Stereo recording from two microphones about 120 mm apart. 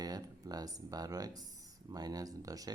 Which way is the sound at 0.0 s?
30° right (ahead or behind).